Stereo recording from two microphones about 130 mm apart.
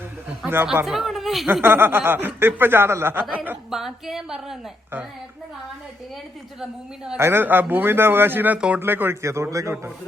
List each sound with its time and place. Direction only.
0.4 s speech: 15° right (ahead or behind)
0.9 s speech: centre (ahead or behind)
1.6 s speech: 15° right (ahead or behind)
3.7 s a woman's voice: 5° right (ahead or behind)
6.6 s a woman's voice: 5° right (ahead or behind)
7.2 s speech: 20° right (ahead or behind)